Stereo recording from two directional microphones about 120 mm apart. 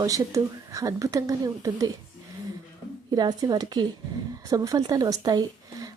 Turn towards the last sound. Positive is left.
turn(degrees=-35)  # may be behind; listen again after turning